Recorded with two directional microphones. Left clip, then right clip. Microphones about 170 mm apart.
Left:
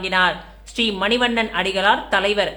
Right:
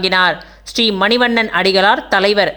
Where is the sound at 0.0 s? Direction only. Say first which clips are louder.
Right 5 dB; 45° right (ahead or behind).